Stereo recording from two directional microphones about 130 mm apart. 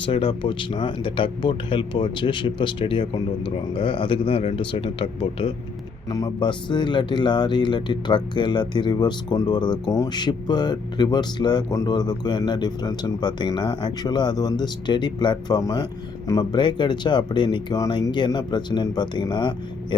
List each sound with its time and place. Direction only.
0.0 s speech: 45° left (ahead or behind)
6.1 s speech: 30° left (ahead or behind)